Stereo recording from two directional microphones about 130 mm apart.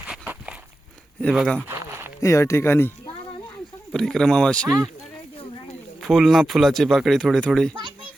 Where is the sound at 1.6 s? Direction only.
15° right (ahead or behind).